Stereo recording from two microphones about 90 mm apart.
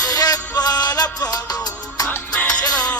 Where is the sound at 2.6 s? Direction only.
50° left (ahead or behind).